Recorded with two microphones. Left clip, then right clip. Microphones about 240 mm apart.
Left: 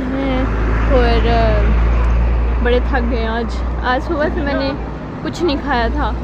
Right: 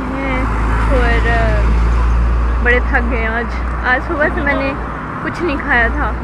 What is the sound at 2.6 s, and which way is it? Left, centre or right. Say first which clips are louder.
Speech: right 3 dB; left.